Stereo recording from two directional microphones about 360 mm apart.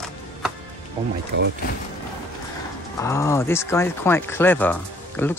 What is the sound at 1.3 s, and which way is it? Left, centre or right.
Speech, right.